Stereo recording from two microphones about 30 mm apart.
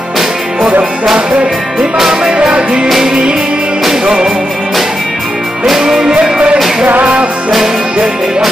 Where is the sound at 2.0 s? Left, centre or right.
Centre.